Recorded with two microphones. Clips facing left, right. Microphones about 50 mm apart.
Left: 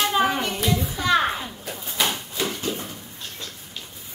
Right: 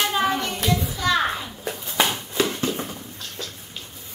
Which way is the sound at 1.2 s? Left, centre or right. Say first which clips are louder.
Even; centre.